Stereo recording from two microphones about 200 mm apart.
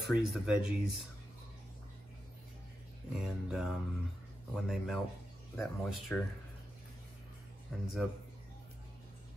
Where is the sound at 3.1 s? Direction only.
5° right (ahead or behind).